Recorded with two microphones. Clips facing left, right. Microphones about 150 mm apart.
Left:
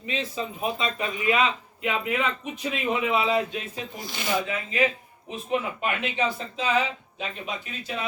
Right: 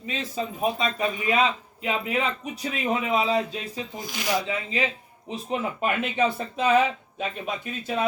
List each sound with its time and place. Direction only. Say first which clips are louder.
0.1 s a man's voice: even; 40° right (ahead or behind)
4.4 s speech: left 2 dB; 30° right (ahead or behind); by 7.9 s 50° right (ahead or behind)